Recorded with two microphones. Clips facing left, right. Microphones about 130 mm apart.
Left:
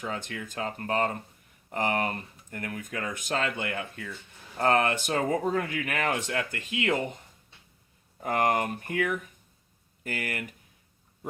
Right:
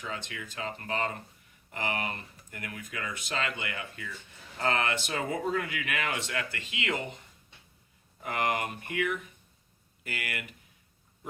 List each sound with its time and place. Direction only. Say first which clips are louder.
0.0 s speech: left 4 dB; 45° left (ahead or behind)
8.2 s speech: left 5 dB; 40° left (ahead or behind)